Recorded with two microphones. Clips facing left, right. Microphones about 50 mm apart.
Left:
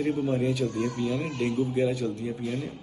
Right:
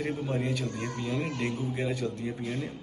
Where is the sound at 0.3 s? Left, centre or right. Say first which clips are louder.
Left 5 dB; right.